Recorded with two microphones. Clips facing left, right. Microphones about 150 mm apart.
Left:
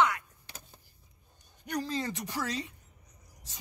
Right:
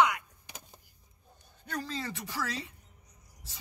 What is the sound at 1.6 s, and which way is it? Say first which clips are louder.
Speech: left 4 dB; 15° left (ahead or behind).